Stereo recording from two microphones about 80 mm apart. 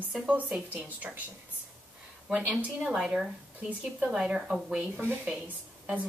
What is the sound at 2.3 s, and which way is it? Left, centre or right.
A woman's voice, centre.